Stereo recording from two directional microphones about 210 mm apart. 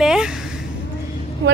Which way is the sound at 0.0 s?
5° right (ahead or behind).